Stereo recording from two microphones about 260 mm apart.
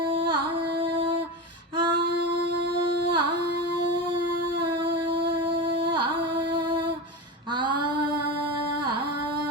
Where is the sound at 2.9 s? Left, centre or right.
Right.